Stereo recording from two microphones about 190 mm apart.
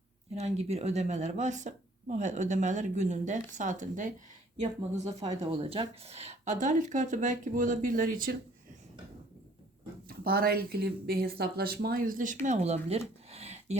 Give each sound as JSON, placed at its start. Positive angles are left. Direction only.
{"t": 0.3, "sound": "speech", "side_deg": -35}
{"t": 10.1, "sound": "speech", "side_deg": -55}
{"t": 13.3, "sound": "a sound", "side_deg": -35}